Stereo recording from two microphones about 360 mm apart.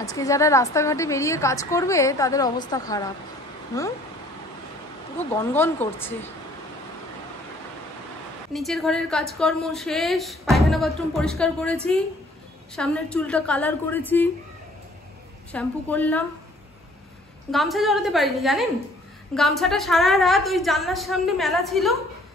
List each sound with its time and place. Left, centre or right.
0.0 s a woman's voice: centre
5.3 s a woman's voice: centre
8.5 s a woman's voice: centre
15.5 s a woman's voice: centre
17.5 s a woman's voice: centre